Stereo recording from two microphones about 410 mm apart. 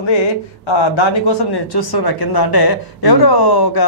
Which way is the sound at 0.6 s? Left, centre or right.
Left.